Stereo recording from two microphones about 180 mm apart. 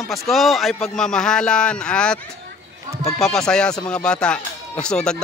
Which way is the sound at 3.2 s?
Centre (ahead or behind).